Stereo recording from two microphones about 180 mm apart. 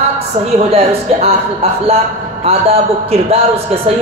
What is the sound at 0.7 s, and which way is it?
Speech, 35° right (ahead or behind).